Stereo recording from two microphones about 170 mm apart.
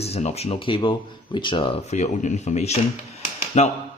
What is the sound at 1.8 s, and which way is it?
Speech, 45° left (ahead or behind).